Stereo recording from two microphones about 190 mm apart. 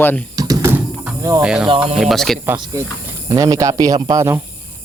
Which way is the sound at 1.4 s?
5° right (ahead or behind).